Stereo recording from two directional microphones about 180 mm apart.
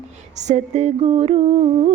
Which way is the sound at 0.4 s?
40° right (ahead or behind).